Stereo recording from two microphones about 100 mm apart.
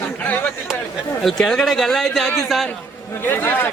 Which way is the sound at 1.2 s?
5° left (ahead or behind).